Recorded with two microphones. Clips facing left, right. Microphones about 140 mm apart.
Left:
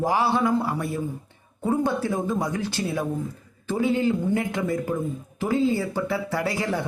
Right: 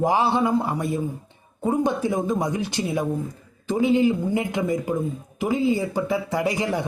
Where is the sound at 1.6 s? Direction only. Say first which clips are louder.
Right 2 dB; 15° right (ahead or behind).